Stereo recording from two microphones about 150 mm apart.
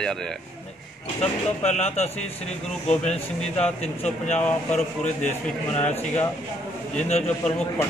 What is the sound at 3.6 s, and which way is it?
Speech, 45° left (ahead or behind).